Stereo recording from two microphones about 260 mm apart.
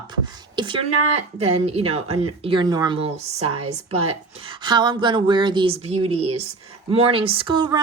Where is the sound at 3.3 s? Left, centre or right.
Right.